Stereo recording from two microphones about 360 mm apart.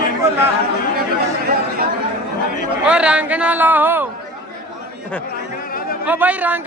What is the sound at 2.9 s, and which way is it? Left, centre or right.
Speech, centre.